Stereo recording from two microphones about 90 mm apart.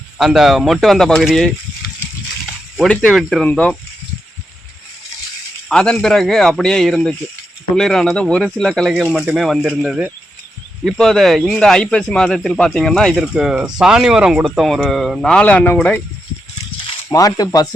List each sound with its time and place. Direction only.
0.2 s speech: 5° right (ahead or behind)
2.9 s speech: 10° left (ahead or behind)
5.6 s speech: 10° left (ahead or behind)
13.2 s speech: 10° right (ahead or behind); by 15.7 s 15° left (ahead or behind)
17.1 s speech: 40° left (ahead or behind)